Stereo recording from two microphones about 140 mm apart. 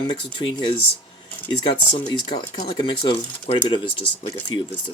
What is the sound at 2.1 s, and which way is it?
Speech, 30° left (ahead or behind).